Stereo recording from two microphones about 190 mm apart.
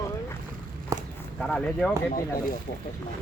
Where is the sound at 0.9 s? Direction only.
15° right (ahead or behind).